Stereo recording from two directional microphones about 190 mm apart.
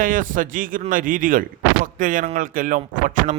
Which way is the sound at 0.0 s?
45° right (ahead or behind).